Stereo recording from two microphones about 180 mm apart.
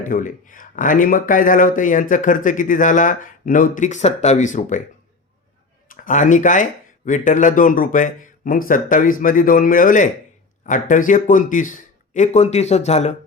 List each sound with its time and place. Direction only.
0.0 s speech: 45° left (ahead or behind)
5.9 s speech: 45° left (ahead or behind)